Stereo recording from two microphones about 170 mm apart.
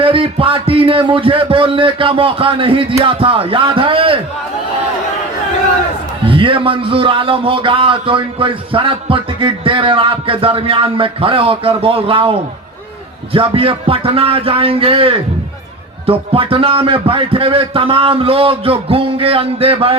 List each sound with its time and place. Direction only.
0.0 s a man's voice: 30° right (ahead or behind)
6.2 s a man's voice: 30° right (ahead or behind)